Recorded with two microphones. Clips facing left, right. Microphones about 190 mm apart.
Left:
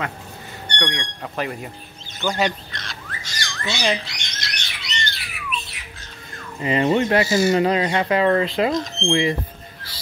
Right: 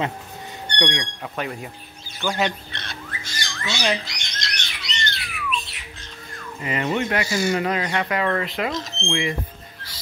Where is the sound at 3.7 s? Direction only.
5° left (ahead or behind).